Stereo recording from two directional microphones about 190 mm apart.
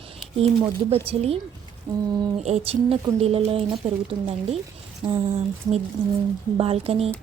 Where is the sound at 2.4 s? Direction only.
35° right (ahead or behind).